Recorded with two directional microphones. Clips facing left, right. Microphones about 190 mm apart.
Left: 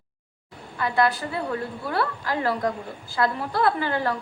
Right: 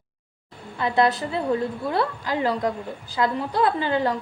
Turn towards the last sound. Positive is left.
turn(degrees=-20)  # may be behind; listen again after turning